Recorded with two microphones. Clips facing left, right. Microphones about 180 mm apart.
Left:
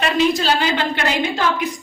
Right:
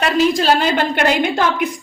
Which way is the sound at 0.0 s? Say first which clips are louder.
Right 2 dB; 50° right (ahead or behind).